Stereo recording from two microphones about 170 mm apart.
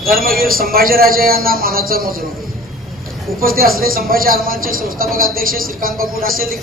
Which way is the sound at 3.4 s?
60° right (ahead or behind).